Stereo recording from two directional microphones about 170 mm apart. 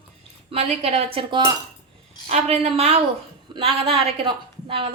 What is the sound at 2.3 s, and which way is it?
A woman's voice, 40° right (ahead or behind).